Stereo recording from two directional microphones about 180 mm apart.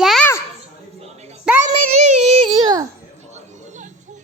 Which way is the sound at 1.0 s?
35° right (ahead or behind).